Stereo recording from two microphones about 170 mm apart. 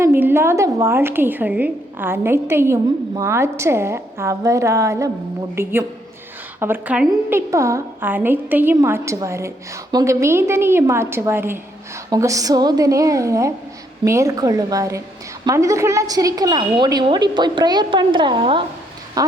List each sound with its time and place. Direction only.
0.0 s a woman's voice: 15° right (ahead or behind)